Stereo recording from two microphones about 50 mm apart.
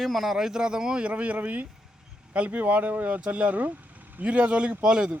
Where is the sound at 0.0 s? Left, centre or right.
Centre.